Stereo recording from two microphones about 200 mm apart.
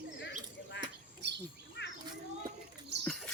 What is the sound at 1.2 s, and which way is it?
Speech, 60° right (ahead or behind).